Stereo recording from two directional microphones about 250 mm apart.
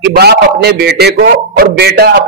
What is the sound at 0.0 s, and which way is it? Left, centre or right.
A man's voice, right.